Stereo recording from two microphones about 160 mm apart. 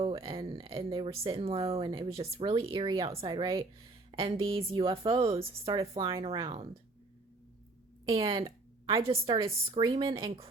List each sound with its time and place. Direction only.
0.0 s speech: 35° right (ahead or behind)
8.2 s speech: 30° right (ahead or behind)